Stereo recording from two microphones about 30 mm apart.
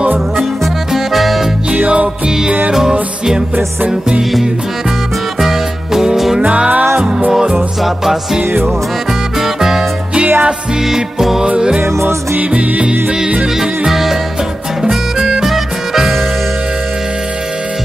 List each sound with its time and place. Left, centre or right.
0.9 s music: centre
2.9 s music: right
5.4 s music: centre
6.7 s music: right
8.0 s music: centre
9.4 s music: centre
10.1 s music: right
10.9 s music: centre
12.4 s music: right
13.6 s music: centre